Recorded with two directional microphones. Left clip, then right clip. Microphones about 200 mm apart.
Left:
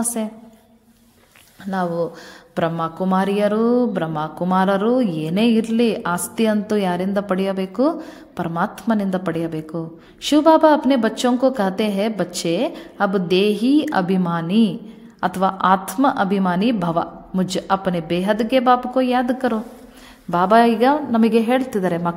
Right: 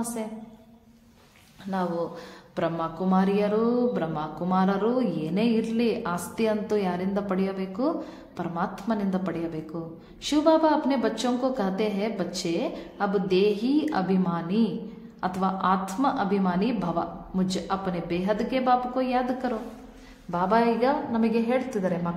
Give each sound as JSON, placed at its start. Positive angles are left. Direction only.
{"t": 0.2, "sound": "a woman's voice", "side_deg": 40}
{"t": 1.7, "sound": "a woman's voice", "side_deg": 35}